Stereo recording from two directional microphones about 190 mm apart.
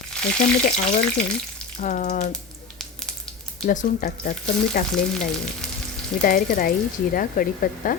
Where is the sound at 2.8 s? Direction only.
Centre (ahead or behind).